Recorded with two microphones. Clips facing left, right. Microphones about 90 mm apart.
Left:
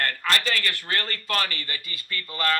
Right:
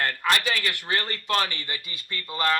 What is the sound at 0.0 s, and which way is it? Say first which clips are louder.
Speech: right 1 dB; 15° right (ahead or behind).